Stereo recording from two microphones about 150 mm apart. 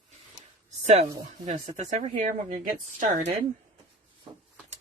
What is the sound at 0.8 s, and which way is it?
Speech, 45° right (ahead or behind).